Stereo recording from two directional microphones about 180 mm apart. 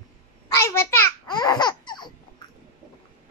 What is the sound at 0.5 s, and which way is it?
Babbling, 15° left (ahead or behind).